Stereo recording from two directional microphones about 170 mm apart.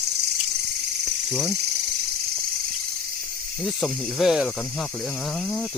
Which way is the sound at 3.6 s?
5° left (ahead or behind).